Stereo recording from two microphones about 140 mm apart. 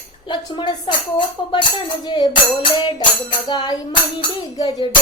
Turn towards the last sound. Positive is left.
turn(degrees=25)  # may be behind; listen again after turning